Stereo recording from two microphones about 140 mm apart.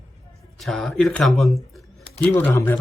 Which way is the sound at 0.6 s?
Centre (ahead or behind).